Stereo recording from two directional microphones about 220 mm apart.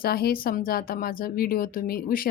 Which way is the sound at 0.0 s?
45° left (ahead or behind).